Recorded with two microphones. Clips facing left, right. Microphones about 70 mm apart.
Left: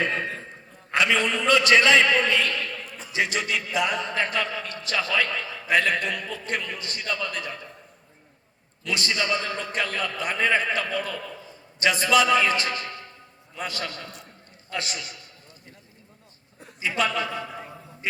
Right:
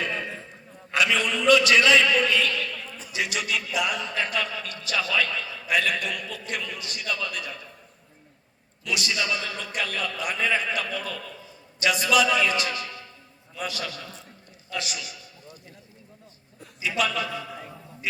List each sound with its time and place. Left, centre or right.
0.0 s a sound: left
0.9 s a man's voice: left
9.0 s a man's voice: left
16.8 s a man's voice: left